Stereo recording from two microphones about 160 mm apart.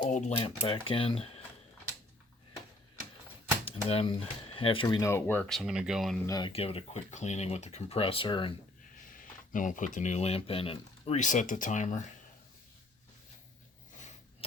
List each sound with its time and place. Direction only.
0.1 s speech: 45° left (ahead or behind)
3.7 s speech: 35° left (ahead or behind)
5.0 s speech: 15° left (ahead or behind); by 6.1 s centre (ahead or behind)
6.2 s speech: 25° left (ahead or behind)
6.5 s speech: 35° left (ahead or behind)
9.5 s speech: 55° left (ahead or behind)